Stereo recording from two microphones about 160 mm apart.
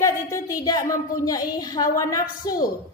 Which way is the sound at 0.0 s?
20° left (ahead or behind).